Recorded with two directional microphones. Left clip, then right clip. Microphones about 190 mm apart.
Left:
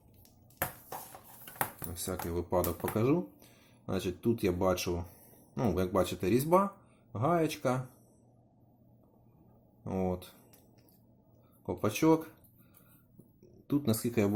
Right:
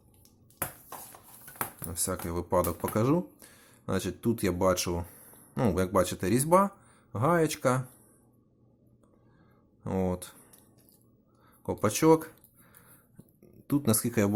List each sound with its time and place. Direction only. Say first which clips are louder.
1.9 s speech: right 3 dB; 30° right (ahead or behind)
9.8 s speech: right 3 dB; 30° right (ahead or behind)
11.6 s speech: right 4 dB; 30° right (ahead or behind)
13.7 s speech: right 3 dB; 25° right (ahead or behind)